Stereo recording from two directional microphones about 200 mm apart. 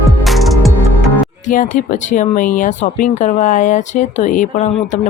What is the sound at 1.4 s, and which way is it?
Speech, 40° left (ahead or behind).